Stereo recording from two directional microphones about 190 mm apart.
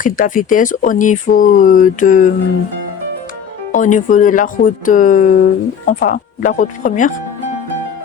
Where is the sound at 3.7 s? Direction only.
45° left (ahead or behind).